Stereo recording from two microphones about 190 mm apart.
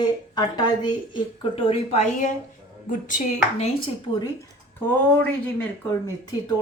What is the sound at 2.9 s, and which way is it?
Speech, 45° left (ahead or behind).